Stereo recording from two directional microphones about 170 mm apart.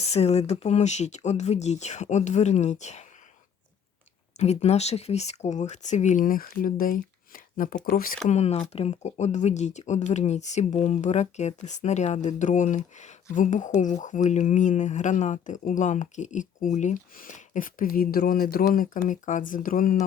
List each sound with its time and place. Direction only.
0.0 s speech: 40° left (ahead or behind)
4.4 s speech: 40° left (ahead or behind); by 8.2 s 60° left (ahead or behind)
8.3 s speech: 40° left (ahead or behind)